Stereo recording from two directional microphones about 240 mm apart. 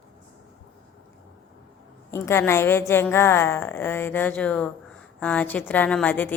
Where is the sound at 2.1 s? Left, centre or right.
Centre.